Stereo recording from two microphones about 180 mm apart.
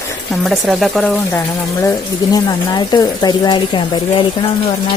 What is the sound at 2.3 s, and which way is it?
Speech, 20° left (ahead or behind).